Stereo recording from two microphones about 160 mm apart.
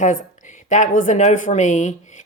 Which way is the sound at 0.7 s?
50° left (ahead or behind).